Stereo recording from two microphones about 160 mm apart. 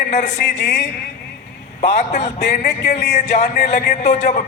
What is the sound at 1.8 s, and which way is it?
Speech, 45° left (ahead or behind).